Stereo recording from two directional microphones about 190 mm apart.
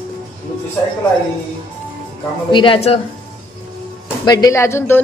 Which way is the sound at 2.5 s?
30° left (ahead or behind).